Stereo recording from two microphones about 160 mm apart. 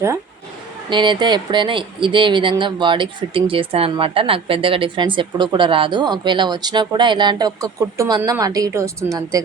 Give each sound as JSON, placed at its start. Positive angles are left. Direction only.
{"t": 0.9, "sound": "speech", "side_deg": -30}